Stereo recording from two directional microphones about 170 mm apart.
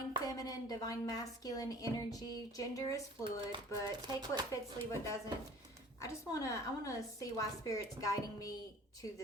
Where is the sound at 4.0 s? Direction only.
25° right (ahead or behind).